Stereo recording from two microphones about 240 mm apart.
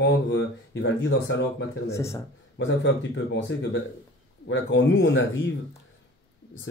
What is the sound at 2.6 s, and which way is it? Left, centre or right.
Speech, left.